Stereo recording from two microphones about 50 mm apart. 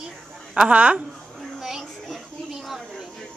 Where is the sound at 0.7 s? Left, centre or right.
Right.